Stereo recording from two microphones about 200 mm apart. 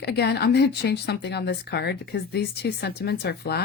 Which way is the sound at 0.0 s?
55° left (ahead or behind).